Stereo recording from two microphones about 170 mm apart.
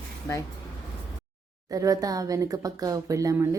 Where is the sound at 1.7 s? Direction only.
20° right (ahead or behind).